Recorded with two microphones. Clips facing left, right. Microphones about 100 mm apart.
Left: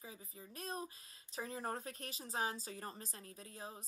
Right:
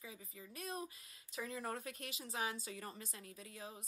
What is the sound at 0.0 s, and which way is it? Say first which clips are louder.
Speech: even; 35° left (ahead or behind).